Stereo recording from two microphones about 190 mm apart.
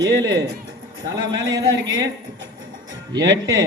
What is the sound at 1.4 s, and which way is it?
Speech, 75° right (ahead or behind).